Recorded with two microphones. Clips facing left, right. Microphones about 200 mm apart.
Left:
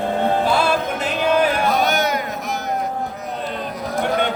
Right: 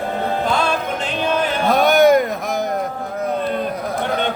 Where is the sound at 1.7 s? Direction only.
55° right (ahead or behind).